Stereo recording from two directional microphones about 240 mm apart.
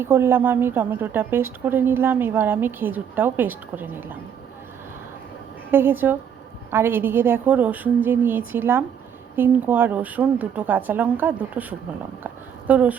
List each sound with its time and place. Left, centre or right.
0.0 s a woman's voice: centre
5.7 s a woman's voice: centre
12.2 s a sound: centre